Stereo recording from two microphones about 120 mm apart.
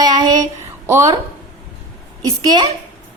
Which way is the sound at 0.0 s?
35° right (ahead or behind).